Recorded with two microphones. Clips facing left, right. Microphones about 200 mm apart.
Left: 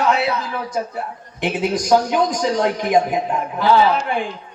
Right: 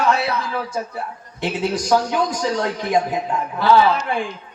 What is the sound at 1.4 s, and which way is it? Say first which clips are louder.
A man's voice: left 2 dB; 15° left (ahead or behind).